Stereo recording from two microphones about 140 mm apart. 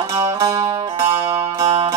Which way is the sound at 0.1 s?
35° right (ahead or behind).